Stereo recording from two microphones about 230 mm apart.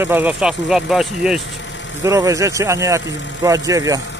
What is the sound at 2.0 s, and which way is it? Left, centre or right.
Speech, centre.